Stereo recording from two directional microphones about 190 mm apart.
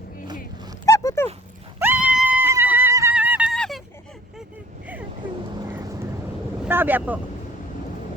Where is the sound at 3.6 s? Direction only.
Centre (ahead or behind).